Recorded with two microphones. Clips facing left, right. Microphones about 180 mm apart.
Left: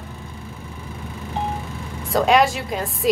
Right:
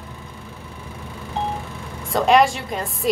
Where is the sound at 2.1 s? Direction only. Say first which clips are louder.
Right 1 dB; centre (ahead or behind).